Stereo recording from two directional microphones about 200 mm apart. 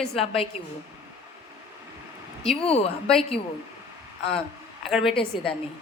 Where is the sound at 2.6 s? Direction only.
30° left (ahead or behind).